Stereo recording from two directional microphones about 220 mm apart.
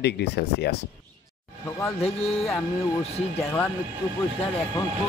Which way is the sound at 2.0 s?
30° left (ahead or behind).